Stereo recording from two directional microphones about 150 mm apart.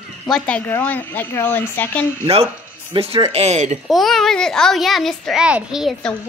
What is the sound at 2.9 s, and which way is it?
Speech, 40° right (ahead or behind).